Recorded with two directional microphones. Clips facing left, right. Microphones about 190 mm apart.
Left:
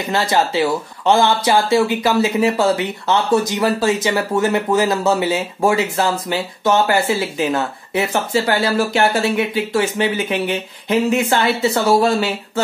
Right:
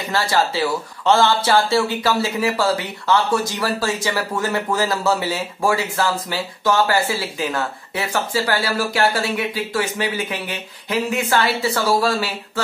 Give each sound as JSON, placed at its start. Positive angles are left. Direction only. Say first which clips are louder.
{"t": 0.1, "sound": "speech", "louder": "left 2 dB", "side_deg": 20}